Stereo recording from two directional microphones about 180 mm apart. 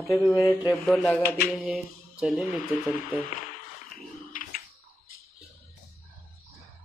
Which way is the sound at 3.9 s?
50° left (ahead or behind).